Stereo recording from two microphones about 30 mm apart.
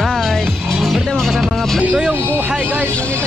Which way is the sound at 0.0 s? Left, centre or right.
Centre.